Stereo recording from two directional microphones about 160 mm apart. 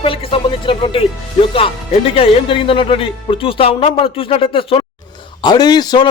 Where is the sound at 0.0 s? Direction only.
35° left (ahead or behind).